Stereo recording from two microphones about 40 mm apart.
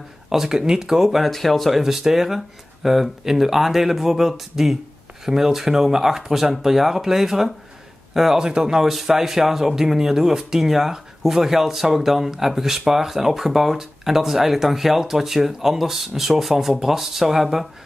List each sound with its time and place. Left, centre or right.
0.3 s speech: centre
1.2 s speech: centre
1.8 s speech: centre
8.4 s speech: centre